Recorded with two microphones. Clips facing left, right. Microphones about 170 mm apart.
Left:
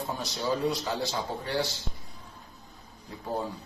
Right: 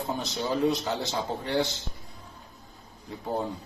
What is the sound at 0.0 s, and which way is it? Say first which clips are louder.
A man's voice: right 1 dB; 20° right (ahead or behind).